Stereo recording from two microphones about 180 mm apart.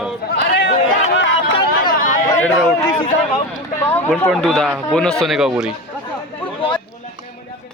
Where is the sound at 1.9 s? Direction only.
50° left (ahead or behind).